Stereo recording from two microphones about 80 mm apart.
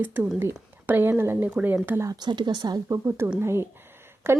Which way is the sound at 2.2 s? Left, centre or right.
Right.